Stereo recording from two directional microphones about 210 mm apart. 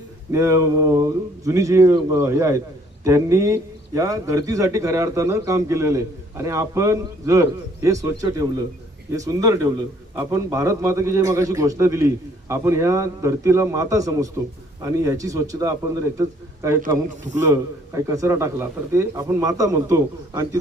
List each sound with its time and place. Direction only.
0.3 s a man's voice: 15° right (ahead or behind)